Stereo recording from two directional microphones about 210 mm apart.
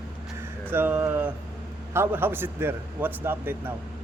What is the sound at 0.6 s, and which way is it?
Speech, 10° right (ahead or behind).